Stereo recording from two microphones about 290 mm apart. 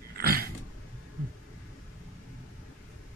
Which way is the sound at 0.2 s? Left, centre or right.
Right.